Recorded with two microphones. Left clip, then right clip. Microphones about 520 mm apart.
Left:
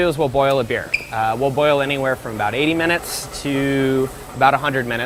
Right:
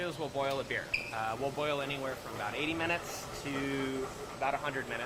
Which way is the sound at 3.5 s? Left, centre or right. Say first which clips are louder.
Left 16 dB; left.